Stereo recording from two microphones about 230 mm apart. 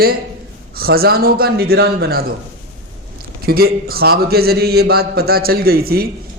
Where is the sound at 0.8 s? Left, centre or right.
Right.